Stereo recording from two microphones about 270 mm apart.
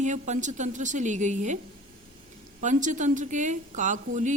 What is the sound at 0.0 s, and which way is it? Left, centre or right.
A woman's voice, right.